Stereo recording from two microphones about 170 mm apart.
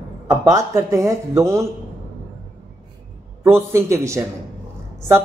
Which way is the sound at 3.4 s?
15° right (ahead or behind).